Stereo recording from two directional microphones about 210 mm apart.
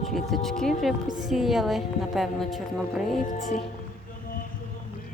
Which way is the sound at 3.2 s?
35° left (ahead or behind).